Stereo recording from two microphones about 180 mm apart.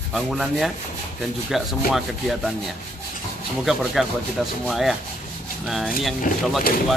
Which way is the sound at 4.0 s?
Centre (ahead or behind).